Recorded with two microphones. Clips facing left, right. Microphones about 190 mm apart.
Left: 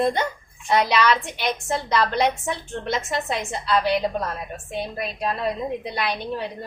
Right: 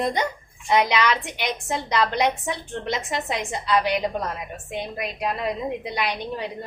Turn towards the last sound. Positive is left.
turn(degrees=-15)  # may be behind; listen again after turning